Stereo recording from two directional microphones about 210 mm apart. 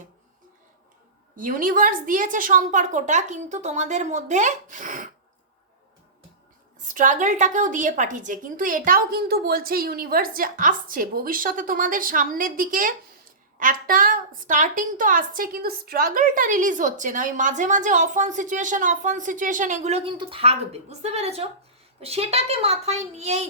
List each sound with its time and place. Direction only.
1.4 s a woman's voice: 40° right (ahead or behind)
6.8 s a woman's voice: 40° right (ahead or behind)